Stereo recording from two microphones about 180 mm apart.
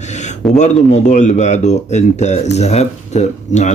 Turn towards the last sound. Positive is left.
turn(degrees=40)  # may be behind; listen again after turning